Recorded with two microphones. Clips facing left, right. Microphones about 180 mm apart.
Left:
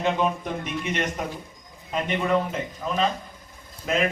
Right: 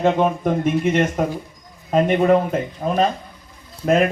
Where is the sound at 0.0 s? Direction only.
45° right (ahead or behind).